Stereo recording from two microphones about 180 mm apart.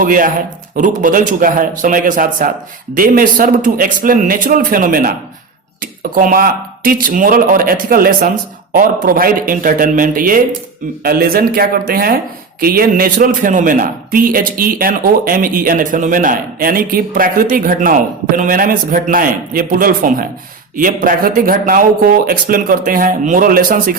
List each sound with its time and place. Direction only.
0.0 s speech: 50° right (ahead or behind)